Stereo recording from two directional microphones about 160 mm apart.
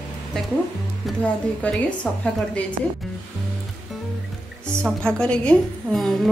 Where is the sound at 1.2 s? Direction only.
5° left (ahead or behind).